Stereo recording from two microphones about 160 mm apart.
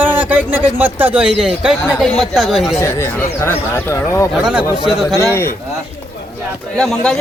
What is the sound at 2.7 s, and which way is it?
Speech, 15° left (ahead or behind).